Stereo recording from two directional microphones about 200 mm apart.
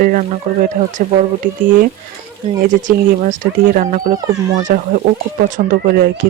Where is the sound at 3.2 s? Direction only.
40° right (ahead or behind).